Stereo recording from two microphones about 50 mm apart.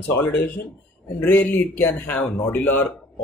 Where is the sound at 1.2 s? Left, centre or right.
Left.